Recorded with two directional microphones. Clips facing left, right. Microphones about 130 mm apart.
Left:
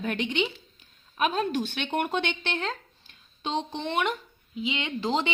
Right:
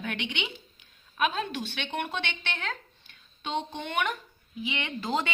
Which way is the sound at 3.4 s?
30° left (ahead or behind).